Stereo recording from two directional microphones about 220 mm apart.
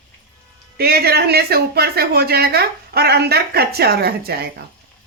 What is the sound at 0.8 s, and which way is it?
Speech, 45° right (ahead or behind).